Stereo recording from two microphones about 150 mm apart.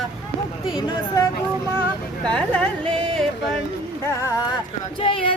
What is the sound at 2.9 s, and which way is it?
Music, 35° right (ahead or behind).